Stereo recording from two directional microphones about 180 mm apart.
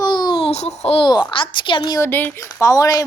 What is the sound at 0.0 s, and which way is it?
A child's voice, 25° left (ahead or behind).